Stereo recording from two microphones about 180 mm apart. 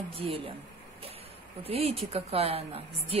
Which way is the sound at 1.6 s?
35° right (ahead or behind).